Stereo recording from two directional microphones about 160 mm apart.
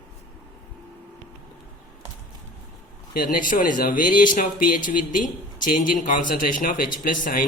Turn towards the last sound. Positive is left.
turn(degrees=60)  # may be behind; listen again after turning